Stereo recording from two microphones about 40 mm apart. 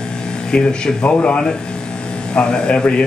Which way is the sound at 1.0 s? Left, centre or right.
Left.